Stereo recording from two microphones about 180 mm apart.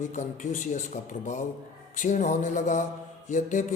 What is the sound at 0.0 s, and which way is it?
Speech, 45° left (ahead or behind).